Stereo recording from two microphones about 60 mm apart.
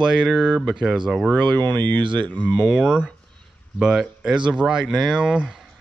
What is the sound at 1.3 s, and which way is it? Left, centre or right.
Speech, left.